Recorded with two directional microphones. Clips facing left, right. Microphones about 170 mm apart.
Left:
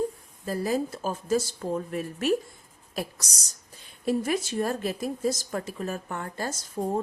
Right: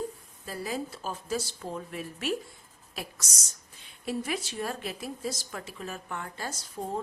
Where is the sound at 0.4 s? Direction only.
45° left (ahead or behind).